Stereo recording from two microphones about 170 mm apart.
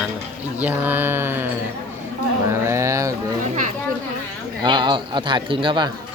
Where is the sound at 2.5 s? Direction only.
15° right (ahead or behind).